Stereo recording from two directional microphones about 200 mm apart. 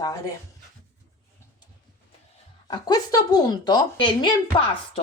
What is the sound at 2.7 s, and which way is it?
A woman's voice, 20° left (ahead or behind).